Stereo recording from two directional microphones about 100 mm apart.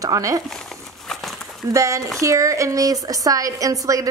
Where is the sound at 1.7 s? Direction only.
30° right (ahead or behind).